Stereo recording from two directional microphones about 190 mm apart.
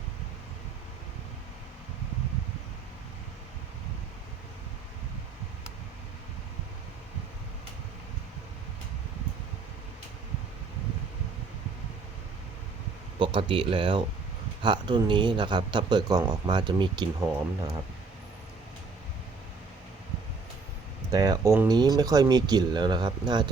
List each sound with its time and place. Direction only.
13.1 s speech: 25° right (ahead or behind)
21.1 s speech: 20° right (ahead or behind)